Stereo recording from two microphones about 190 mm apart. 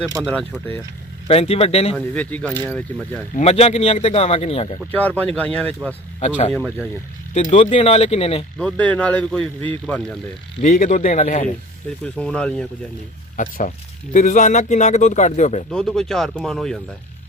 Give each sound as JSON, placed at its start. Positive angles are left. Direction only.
{"t": 0.2, "sound": "speech", "side_deg": 5}
{"t": 1.3, "sound": "speech", "side_deg": 30}
{"t": 2.0, "sound": "speech", "side_deg": 5}
{"t": 3.3, "sound": "speech", "side_deg": 35}
{"t": 4.9, "sound": "speech", "side_deg": 10}
{"t": 6.1, "sound": "speech", "side_deg": 35}
{"t": 6.5, "sound": "speech", "side_deg": 5}
{"t": 7.3, "sound": "speech", "side_deg": 35}
{"t": 8.5, "sound": "speech", "side_deg": 5}
{"t": 10.6, "sound": "speech", "side_deg": 40}
{"t": 12.0, "sound": "speech", "side_deg": 5}
{"t": 13.3, "sound": "speech", "side_deg": 45}
{"t": 15.7, "sound": "speech", "side_deg": 5}